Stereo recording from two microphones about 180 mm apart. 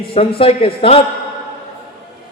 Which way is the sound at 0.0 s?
30° left (ahead or behind).